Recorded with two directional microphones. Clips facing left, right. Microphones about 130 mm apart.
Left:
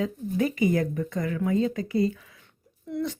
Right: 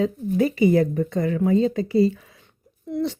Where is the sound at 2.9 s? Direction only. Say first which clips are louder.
Right 5 dB; 25° right (ahead or behind).